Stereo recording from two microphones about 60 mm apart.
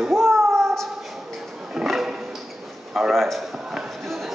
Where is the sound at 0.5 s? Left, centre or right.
Centre.